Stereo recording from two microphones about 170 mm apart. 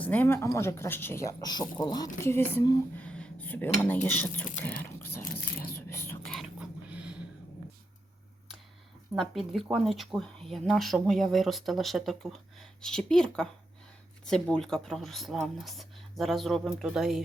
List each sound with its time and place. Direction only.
0.0 s speech: 10° left (ahead or behind)
5.7 s whispering: 15° left (ahead or behind)
6.2 s rodents: centre (ahead or behind)
9.1 s speech: centre (ahead or behind)
14.5 s speech: 5° left (ahead or behind)